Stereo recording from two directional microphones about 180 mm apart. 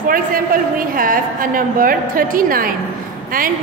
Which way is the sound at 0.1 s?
50° right (ahead or behind).